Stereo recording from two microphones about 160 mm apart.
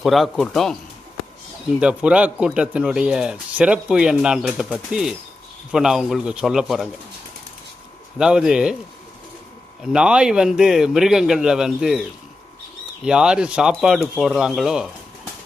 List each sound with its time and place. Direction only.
0.0 s a man's voice: centre (ahead or behind)
1.8 s a man's voice: 5° right (ahead or behind)
8.2 s a man's voice: 5° right (ahead or behind)
9.8 s a man's voice: 5° right (ahead or behind)
13.1 s a man's voice: 5° right (ahead or behind)